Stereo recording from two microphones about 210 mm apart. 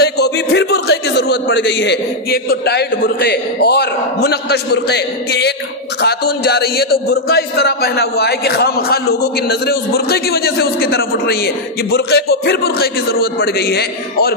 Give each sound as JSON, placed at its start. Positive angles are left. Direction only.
{"t": 0.0, "sound": "speech", "side_deg": 50}